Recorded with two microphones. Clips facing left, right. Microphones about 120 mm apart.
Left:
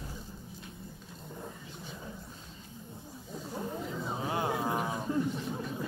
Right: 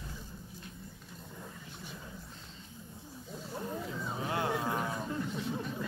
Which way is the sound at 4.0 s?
25° left (ahead or behind).